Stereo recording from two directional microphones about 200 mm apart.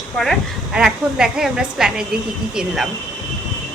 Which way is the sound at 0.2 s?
Centre (ahead or behind).